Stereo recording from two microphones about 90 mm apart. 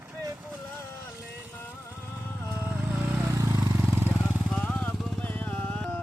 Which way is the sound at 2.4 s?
25° right (ahead or behind).